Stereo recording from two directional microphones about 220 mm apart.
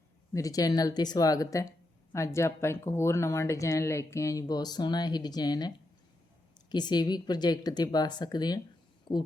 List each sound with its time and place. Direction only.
0.3 s speech: 15° left (ahead or behind)